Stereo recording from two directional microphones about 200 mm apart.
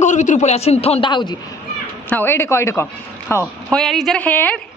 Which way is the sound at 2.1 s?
10° left (ahead or behind).